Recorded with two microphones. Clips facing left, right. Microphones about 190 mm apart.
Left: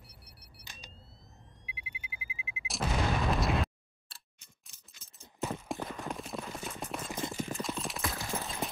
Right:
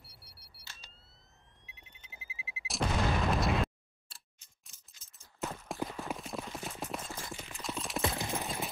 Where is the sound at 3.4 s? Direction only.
Centre (ahead or behind).